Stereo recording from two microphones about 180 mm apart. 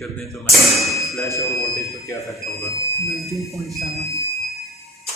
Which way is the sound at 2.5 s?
15° left (ahead or behind).